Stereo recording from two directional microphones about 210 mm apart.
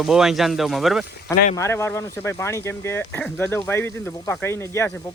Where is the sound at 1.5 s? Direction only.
15° left (ahead or behind).